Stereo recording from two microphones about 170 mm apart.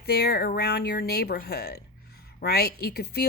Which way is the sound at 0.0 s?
65° left (ahead or behind).